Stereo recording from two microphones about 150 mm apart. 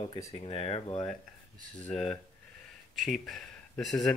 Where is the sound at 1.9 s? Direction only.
5° left (ahead or behind).